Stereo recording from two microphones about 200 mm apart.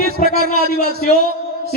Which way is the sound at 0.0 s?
50° right (ahead or behind).